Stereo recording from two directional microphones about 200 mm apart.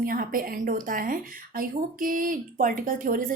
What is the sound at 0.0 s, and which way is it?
A woman's voice, 45° right (ahead or behind).